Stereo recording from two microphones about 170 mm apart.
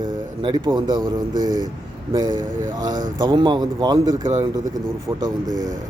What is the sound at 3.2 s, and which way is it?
A man's voice, 25° right (ahead or behind).